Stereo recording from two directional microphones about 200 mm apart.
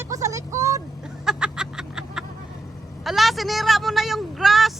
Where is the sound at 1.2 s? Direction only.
5° right (ahead or behind).